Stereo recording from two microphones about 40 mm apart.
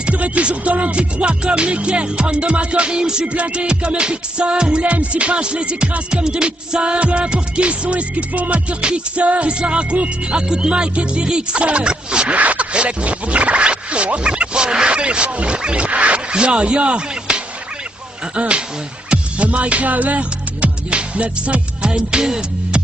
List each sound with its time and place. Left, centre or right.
0.0 s music: right
12.3 s scratch: right
16.3 s music: right